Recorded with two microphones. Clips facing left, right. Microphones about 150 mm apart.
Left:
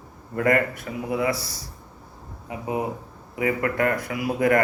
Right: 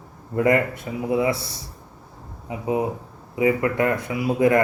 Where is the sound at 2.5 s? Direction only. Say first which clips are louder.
Right 4 dB; 25° right (ahead or behind).